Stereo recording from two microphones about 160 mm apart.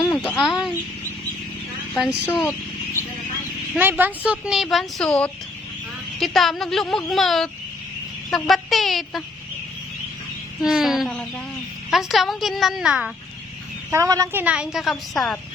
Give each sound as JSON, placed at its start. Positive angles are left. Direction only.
{"t": 0.0, "sound": "a sound", "side_deg": 0}
{"t": 1.9, "sound": "speech", "side_deg": 0}
{"t": 3.8, "sound": "speech", "side_deg": -10}
{"t": 10.6, "sound": "speech", "side_deg": 0}
{"t": 13.9, "sound": "a woman's voice", "side_deg": -20}
{"t": 14.4, "sound": "speech", "side_deg": -5}